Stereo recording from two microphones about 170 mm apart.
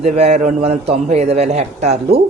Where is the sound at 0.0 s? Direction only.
40° right (ahead or behind).